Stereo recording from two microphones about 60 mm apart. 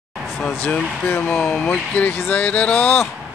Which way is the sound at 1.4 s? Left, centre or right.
Centre.